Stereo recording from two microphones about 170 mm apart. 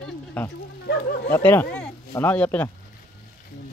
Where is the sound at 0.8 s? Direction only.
70° left (ahead or behind).